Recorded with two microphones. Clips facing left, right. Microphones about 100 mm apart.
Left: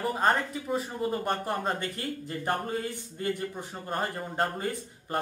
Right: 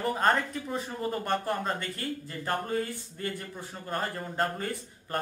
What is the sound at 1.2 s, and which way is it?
Speech, 15° left (ahead or behind).